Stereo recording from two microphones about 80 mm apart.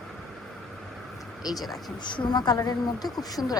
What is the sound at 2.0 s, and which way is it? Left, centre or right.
Speech, left.